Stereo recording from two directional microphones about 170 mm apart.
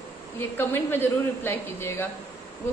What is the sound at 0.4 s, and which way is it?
A woman's voice, 10° left (ahead or behind).